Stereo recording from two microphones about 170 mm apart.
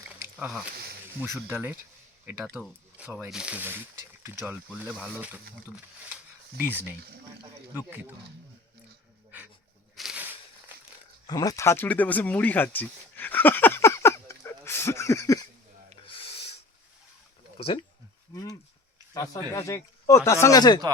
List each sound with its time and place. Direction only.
0.3 s speech: 5° right (ahead or behind)
6.6 s speech: 10° right (ahead or behind)
9.9 s a sound: centre (ahead or behind)
11.3 s speech: 20° left (ahead or behind)
16.0 s snort: 35° left (ahead or behind)
17.6 s speech: 35° left (ahead or behind)
19.1 s speech: 20° left (ahead or behind)